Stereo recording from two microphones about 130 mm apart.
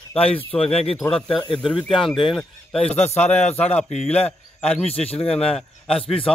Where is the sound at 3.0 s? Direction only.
55° left (ahead or behind).